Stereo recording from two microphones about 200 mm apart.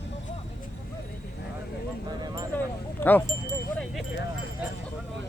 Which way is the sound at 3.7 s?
Centre (ahead or behind).